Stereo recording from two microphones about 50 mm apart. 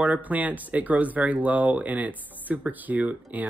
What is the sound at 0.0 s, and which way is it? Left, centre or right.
Speech, right.